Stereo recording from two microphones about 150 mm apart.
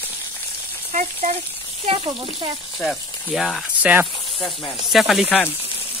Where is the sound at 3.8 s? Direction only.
10° right (ahead or behind).